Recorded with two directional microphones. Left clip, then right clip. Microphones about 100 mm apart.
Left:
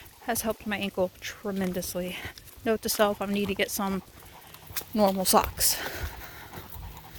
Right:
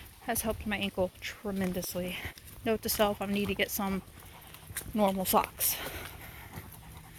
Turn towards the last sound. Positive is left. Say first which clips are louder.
# left 4 dB
turn(degrees=55)  # may be behind; listen again after turning